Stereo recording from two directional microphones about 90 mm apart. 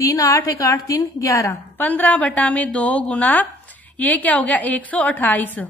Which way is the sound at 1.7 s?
20° left (ahead or behind).